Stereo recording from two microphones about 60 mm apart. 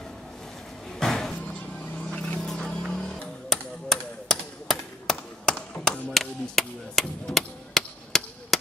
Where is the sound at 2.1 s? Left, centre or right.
Centre.